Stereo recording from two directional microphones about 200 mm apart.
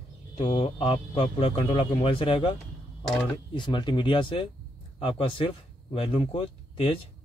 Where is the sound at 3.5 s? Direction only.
25° left (ahead or behind).